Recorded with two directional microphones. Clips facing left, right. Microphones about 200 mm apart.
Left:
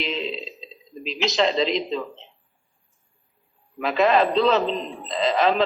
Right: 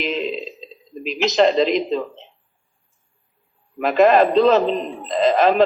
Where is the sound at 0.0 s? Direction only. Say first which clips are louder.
Right 5 dB; 50° right (ahead or behind).